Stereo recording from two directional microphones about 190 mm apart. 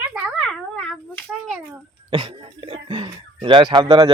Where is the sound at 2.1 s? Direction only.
30° right (ahead or behind).